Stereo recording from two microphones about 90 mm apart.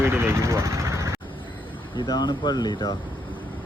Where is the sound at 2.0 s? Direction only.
50° left (ahead or behind).